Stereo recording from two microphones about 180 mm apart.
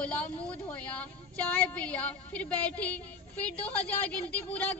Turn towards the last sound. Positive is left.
turn(degrees=5)  # may be behind; listen again after turning